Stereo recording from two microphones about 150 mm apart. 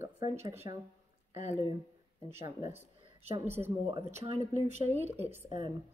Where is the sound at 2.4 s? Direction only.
20° right (ahead or behind).